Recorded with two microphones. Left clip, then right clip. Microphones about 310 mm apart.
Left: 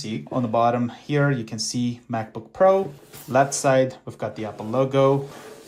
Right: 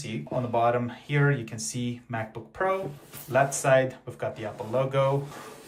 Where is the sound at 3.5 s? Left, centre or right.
Centre.